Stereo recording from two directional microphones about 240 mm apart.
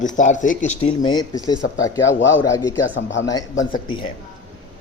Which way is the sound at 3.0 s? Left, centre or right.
Left.